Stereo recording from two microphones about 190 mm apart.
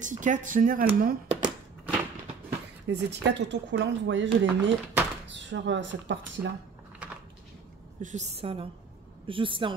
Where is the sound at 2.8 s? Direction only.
65° right (ahead or behind).